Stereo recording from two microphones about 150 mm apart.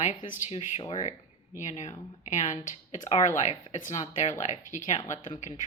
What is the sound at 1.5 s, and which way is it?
Speech, 50° left (ahead or behind).